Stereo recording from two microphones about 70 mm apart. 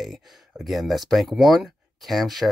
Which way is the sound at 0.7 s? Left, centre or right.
Centre.